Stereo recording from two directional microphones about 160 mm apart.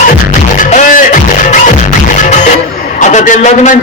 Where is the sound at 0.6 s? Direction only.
50° left (ahead or behind).